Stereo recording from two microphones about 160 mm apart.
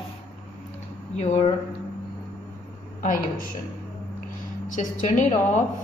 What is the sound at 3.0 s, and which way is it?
Speech, 60° left (ahead or behind).